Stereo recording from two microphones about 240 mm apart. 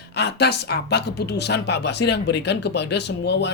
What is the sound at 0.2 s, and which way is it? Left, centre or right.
Speech, left.